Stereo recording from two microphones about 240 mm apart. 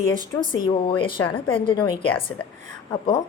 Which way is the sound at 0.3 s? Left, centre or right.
Left.